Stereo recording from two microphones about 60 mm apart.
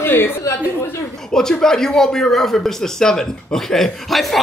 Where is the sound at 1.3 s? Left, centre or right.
Centre.